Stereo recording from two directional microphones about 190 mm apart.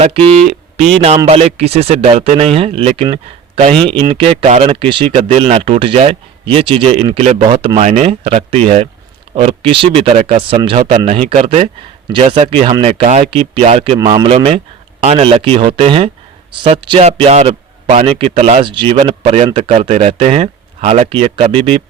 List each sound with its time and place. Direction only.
0.0 s speech: 30° right (ahead or behind)